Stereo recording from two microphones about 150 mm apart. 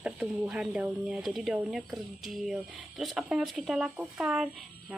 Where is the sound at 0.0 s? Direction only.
5° right (ahead or behind).